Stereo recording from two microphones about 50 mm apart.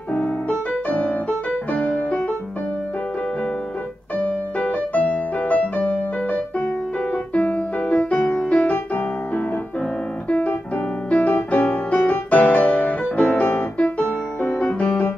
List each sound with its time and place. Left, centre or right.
0.1 s piano: left
1.7 s music: left
4.2 s music: left
8.2 s music: left
8.5 s music: left
11.1 s music: left
13.4 s piano: left